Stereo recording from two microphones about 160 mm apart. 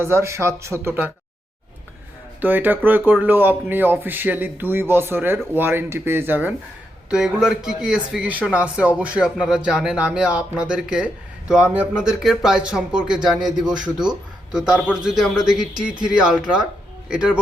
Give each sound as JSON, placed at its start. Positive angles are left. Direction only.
{"t": 0.0, "sound": "speech", "side_deg": -15}
{"t": 2.4, "sound": "speech", "side_deg": -10}